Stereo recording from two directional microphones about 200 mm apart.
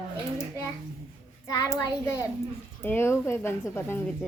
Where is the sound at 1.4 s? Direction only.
15° left (ahead or behind).